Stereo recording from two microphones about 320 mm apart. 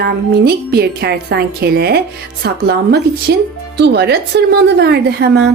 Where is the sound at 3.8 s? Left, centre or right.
Right.